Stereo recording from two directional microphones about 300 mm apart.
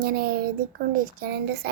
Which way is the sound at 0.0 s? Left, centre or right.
Right.